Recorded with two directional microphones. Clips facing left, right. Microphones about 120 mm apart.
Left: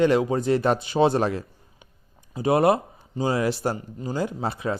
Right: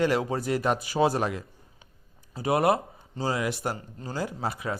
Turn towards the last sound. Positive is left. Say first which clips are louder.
# left 4 dB
turn(degrees=25)  # may be behind; listen again after turning